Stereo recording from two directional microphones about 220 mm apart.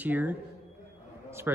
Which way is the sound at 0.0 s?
10° right (ahead or behind).